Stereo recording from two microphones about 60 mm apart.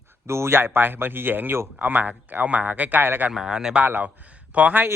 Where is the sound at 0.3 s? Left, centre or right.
Right.